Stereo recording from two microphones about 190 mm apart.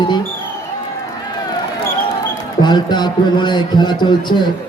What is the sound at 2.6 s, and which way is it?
A man's voice, 25° left (ahead or behind).